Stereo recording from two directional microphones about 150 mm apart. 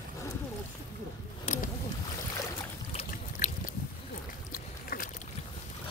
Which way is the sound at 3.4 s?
50° left (ahead or behind).